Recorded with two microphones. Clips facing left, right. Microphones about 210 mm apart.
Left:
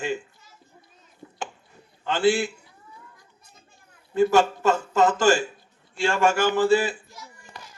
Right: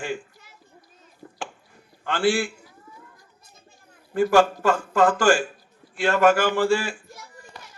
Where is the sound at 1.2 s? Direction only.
50° right (ahead or behind).